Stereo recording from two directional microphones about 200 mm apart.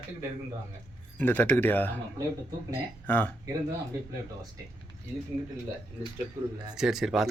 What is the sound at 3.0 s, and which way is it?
Speech, 10° left (ahead or behind).